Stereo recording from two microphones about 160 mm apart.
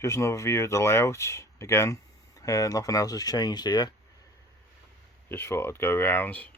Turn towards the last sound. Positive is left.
turn(degrees=10)  # may be behind; listen again after turning